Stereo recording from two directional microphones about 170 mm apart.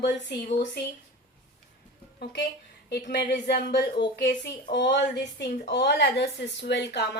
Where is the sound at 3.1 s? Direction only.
75° left (ahead or behind).